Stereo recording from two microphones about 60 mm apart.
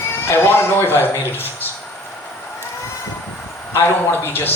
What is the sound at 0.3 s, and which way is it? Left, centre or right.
Speech, left.